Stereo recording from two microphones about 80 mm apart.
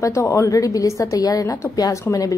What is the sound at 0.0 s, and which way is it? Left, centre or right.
A woman's voice, left.